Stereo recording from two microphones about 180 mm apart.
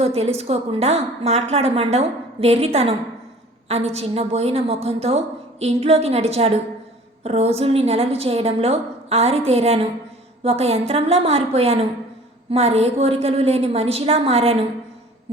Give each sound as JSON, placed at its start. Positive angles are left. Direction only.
{"t": 0.0, "sound": "a woman's voice", "side_deg": -35}